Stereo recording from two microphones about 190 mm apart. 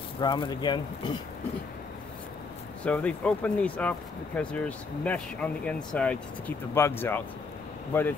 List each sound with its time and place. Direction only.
0.2 s speech: 25° left (ahead or behind)
2.8 s speech: 5° left (ahead or behind)